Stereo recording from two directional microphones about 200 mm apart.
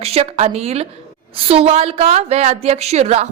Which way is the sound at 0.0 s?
30° right (ahead or behind).